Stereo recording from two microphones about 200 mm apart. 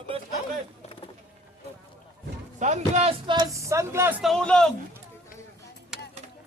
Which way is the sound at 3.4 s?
15° right (ahead or behind).